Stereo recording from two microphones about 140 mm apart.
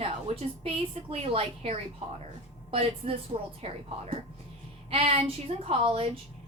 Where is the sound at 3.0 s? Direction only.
50° right (ahead or behind).